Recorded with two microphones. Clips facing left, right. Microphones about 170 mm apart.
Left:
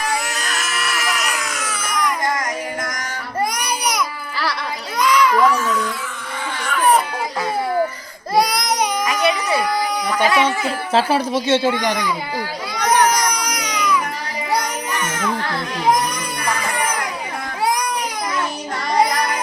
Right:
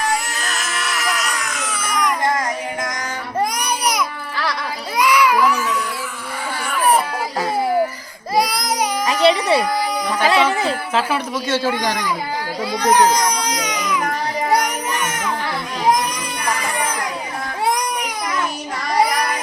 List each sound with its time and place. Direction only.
0.0 s baby cry: centre (ahead or behind)
3.8 s baby cry: centre (ahead or behind)
4.9 s baby cry: 10° right (ahead or behind)
8.4 s baby cry: 5° right (ahead or behind)
9.0 s baby cry: 30° right (ahead or behind)
10.2 s speech: 30° right (ahead or behind)
10.9 s speech: 35° left (ahead or behind)
11.4 s speech: 20° left (ahead or behind)
12.7 s baby cry: 25° right (ahead or behind)